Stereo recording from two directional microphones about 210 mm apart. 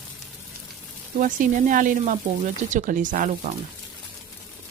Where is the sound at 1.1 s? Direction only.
40° right (ahead or behind).